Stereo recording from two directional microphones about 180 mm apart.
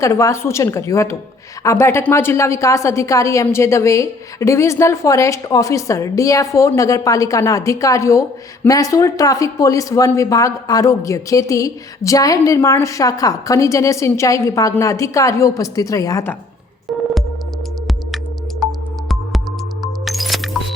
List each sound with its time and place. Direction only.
0.0 s speech: 15° left (ahead or behind)
18.6 s music: centre (ahead or behind)